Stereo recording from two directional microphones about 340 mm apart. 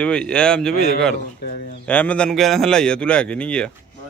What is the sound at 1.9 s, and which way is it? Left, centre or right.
A man's voice, centre.